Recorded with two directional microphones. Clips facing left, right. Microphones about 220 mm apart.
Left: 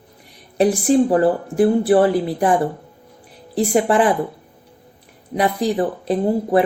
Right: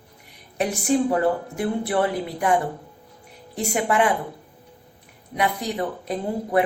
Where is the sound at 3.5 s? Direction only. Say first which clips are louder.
Left 6 dB; 35° left (ahead or behind).